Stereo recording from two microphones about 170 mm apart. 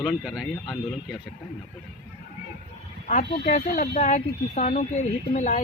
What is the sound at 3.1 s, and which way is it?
Speech, 45° left (ahead or behind).